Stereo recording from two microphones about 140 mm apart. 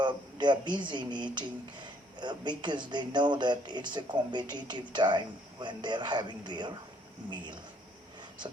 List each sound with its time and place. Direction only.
0.0 s speech: 35° right (ahead or behind)